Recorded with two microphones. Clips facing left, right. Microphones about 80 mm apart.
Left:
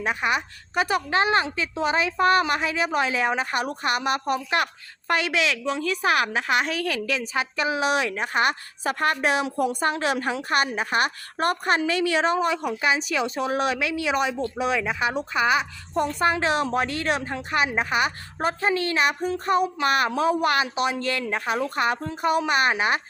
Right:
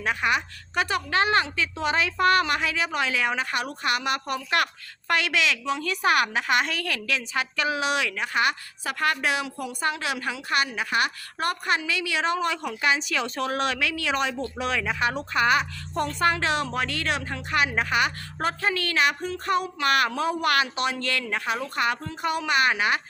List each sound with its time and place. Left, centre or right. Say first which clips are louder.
0.0 s a woman's voice: even; centre
5.6 s a woman's voice: left 1 dB; centre
6.8 s a woman's voice: left 3 dB; left
12.2 s speech: left 3 dB; left
16.0 s a woman's voice: left 1 dB; centre